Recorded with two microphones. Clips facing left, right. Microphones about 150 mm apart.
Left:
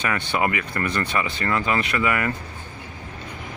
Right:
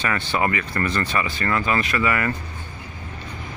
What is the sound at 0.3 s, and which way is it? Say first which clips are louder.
Speech: right 1 dB; 15° left (ahead or behind).